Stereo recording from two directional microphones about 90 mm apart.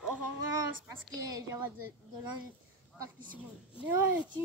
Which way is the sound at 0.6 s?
40° right (ahead or behind).